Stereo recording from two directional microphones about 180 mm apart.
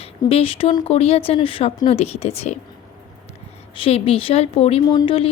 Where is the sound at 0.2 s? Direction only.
30° left (ahead or behind).